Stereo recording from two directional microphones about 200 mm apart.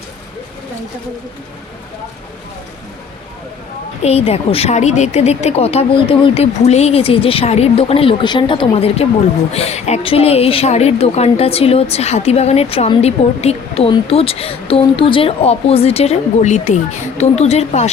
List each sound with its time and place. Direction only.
4.0 s speech: 30° left (ahead or behind)